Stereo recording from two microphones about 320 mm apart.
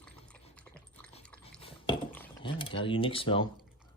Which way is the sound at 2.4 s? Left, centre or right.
Centre.